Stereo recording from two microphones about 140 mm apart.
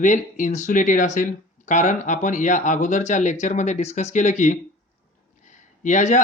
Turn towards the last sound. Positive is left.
turn(degrees=60)  # may be behind; listen again after turning